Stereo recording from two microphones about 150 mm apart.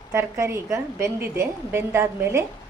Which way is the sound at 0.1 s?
20° right (ahead or behind).